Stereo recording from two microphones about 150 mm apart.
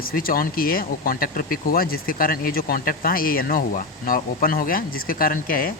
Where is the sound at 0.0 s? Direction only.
75° left (ahead or behind).